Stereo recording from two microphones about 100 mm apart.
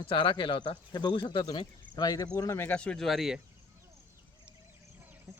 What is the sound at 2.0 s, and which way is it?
Speech, 40° left (ahead or behind).